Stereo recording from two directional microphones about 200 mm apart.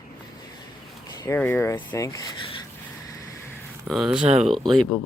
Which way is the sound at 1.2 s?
15° left (ahead or behind).